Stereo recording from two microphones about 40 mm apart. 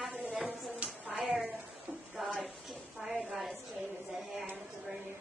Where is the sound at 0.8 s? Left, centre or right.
Right.